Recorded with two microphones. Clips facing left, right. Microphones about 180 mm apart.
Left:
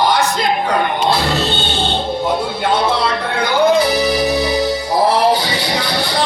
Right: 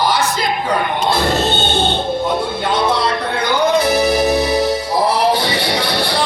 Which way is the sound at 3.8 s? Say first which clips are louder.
Right 1 dB; 50° right (ahead or behind).